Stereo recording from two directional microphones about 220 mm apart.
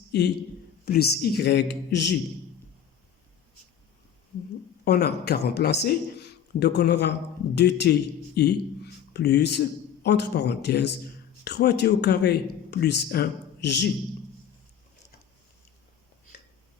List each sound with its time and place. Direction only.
0.9 s speech: 45° left (ahead or behind)
4.9 s a man's voice: 45° left (ahead or behind)